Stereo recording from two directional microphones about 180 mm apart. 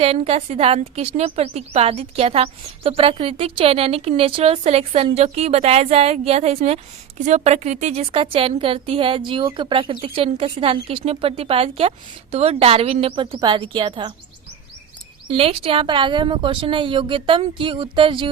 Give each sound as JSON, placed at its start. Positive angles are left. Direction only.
{"t": 0.0, "sound": "a woman's voice", "side_deg": -35}
{"t": 15.3, "sound": "speech", "side_deg": -30}